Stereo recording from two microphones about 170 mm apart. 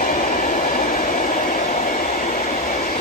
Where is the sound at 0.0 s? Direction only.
55° left (ahead or behind).